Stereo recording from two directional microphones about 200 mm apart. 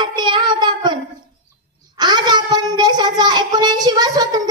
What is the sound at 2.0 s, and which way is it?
Child singing, 20° right (ahead or behind).